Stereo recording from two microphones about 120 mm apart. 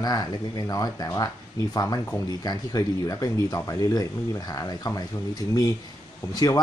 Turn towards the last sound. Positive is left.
turn(degrees=30)  # may be behind; listen again after turning